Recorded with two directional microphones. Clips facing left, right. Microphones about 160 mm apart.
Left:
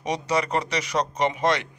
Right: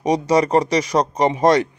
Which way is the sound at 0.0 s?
35° right (ahead or behind).